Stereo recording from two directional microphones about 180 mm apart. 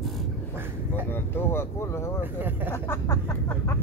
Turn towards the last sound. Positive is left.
turn(degrees=15)  # may be behind; listen again after turning